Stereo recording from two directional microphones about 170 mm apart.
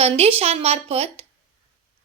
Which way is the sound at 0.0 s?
35° right (ahead or behind).